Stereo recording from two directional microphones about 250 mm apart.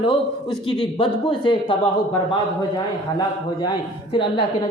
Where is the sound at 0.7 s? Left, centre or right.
Left.